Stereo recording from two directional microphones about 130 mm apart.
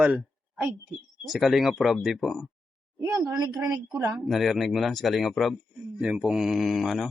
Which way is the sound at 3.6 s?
30° right (ahead or behind).